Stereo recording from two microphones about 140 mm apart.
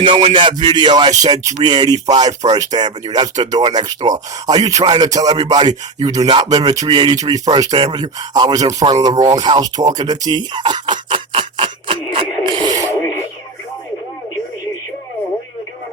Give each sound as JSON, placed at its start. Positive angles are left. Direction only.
{"t": 0.0, "sound": "music", "side_deg": -35}
{"t": 2.5, "sound": "speech", "side_deg": -30}
{"t": 5.4, "sound": "music", "side_deg": -30}
{"t": 7.5, "sound": "speech", "side_deg": -30}
{"t": 9.2, "sound": "a sound", "side_deg": -30}
{"t": 12.9, "sound": "radio", "side_deg": 15}